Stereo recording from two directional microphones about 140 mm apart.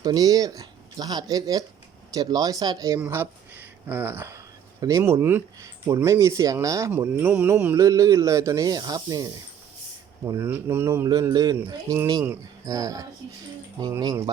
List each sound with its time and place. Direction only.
0.0 s speech: 25° right (ahead or behind)
3.0 s speech: 15° right (ahead or behind)
10.2 s speech: 15° right (ahead or behind)